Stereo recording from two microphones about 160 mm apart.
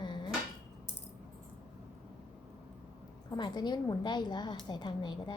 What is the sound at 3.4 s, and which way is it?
Speech, 25° left (ahead or behind).